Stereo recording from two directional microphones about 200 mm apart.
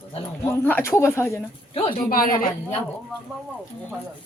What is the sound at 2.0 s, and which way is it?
Speech, 45° left (ahead or behind).